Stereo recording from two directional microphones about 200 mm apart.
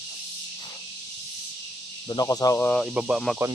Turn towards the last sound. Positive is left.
turn(degrees=0)  # may be behind; listen again after turning